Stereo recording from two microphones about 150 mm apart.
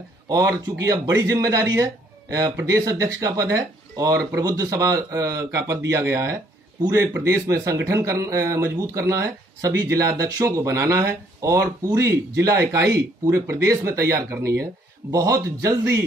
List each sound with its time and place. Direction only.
0.3 s speech: 25° right (ahead or behind)